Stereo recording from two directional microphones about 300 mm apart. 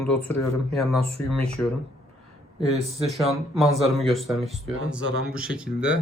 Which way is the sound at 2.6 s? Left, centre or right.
Right.